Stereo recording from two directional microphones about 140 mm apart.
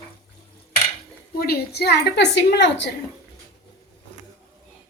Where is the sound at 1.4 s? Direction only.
90° left.